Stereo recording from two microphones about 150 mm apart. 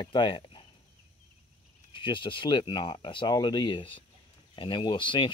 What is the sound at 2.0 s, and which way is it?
Speech, 35° left (ahead or behind).